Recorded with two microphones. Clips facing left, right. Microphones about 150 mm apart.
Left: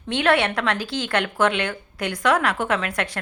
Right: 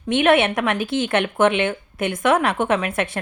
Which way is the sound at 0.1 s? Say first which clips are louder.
Right 4 dB; 20° right (ahead or behind).